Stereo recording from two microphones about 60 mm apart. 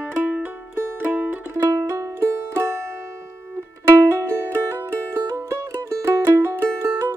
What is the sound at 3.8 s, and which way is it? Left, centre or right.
Music, right.